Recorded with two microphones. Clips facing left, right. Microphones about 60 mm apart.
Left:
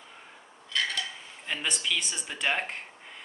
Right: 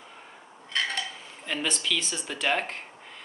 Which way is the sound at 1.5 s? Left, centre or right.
Centre.